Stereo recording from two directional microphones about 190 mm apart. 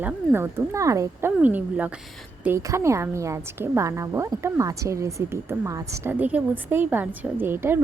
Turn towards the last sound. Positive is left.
turn(degrees=-10)  # may be behind; listen again after turning